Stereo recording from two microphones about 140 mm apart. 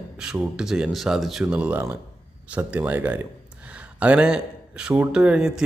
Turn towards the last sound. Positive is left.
turn(degrees=-5)  # may be behind; listen again after turning